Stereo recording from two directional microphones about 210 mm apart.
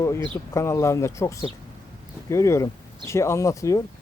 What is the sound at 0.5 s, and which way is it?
Speech, 15° left (ahead or behind).